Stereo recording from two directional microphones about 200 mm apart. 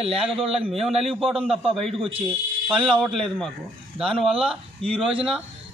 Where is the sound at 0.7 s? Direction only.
Centre (ahead or behind).